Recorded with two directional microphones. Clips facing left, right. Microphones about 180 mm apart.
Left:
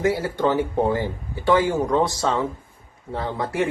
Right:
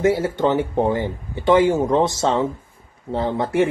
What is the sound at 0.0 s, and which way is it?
A man's voice, 25° right (ahead or behind).